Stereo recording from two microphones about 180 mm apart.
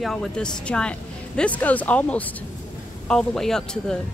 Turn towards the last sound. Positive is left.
turn(degrees=5)  # may be behind; listen again after turning